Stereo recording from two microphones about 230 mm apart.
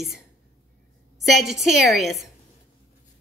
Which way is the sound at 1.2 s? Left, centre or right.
Centre.